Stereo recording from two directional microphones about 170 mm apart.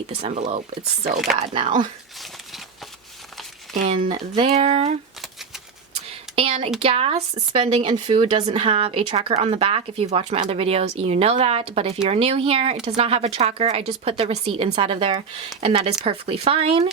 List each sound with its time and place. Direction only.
0.1 s speech: 40° right (ahead or behind)
1.1 s speech: centre (ahead or behind)
1.5 s speech: 30° right (ahead or behind)
3.8 s speech: 30° right (ahead or behind)
5.9 s a sound: 35° right (ahead or behind)
6.8 s speech: 35° right (ahead or behind)